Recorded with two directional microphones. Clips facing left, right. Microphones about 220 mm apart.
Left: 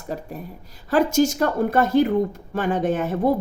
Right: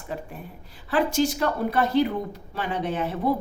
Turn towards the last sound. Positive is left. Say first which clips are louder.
# left 5 dB
turn(degrees=45)  # may be behind; listen again after turning